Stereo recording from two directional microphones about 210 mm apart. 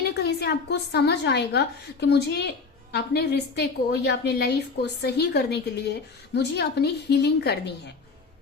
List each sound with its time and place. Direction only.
0.0 s a woman's voice: 50° left (ahead or behind)